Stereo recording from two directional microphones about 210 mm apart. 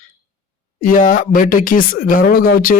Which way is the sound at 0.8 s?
40° left (ahead or behind).